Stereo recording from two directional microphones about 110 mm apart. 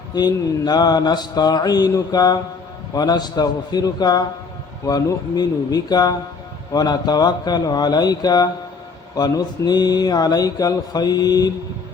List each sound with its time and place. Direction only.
0.1 s speech: 40° left (ahead or behind)